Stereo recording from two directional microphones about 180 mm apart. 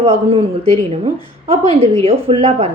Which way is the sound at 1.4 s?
35° right (ahead or behind).